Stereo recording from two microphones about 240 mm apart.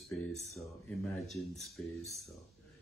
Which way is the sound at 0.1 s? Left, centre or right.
Centre.